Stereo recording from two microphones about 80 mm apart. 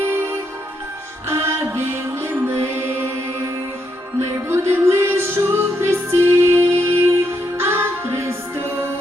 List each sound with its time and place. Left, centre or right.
0.0 s music: right
4.4 s music: right